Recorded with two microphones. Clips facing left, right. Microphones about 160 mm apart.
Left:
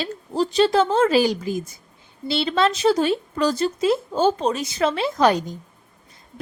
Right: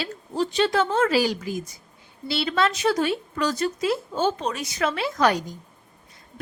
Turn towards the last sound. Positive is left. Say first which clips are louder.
# left 3 dB
turn(degrees=25)  # may be behind; listen again after turning